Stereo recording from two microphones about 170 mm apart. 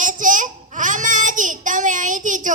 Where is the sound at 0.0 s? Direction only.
50° right (ahead or behind).